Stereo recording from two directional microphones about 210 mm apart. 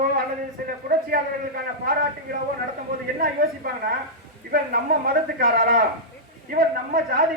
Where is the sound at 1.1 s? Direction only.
45° right (ahead or behind).